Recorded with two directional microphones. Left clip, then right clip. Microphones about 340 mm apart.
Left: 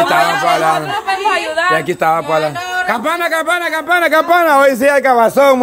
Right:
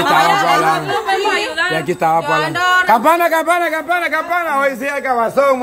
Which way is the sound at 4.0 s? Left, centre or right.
Centre.